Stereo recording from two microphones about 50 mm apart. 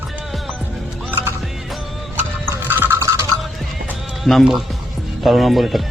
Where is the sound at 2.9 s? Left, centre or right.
Right.